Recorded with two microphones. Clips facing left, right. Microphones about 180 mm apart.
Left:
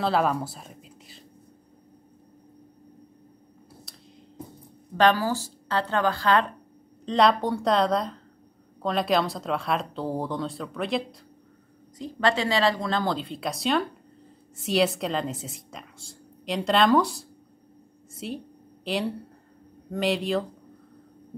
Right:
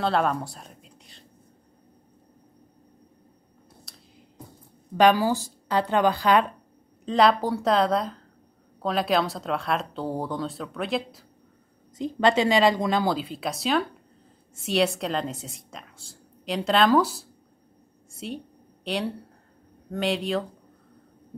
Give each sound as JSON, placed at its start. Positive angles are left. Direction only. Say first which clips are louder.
{"t": 0.0, "sound": "speech", "louder": "even", "side_deg": 0}
{"t": 3.9, "sound": "a sound", "louder": "left 1 dB", "side_deg": 0}
{"t": 4.9, "sound": "speech", "louder": "right 2 dB", "side_deg": -15}
{"t": 7.1, "sound": "speech", "louder": "right 1 dB", "side_deg": 0}
{"t": 12.0, "sound": "a woman's voice", "louder": "right 4 dB", "side_deg": -20}